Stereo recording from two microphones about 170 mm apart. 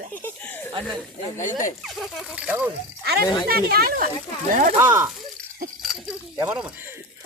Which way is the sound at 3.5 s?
65° right (ahead or behind).